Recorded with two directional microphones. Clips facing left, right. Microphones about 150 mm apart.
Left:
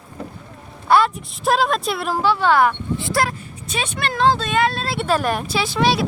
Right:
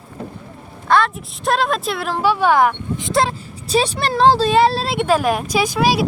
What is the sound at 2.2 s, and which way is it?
Speech, 15° right (ahead or behind).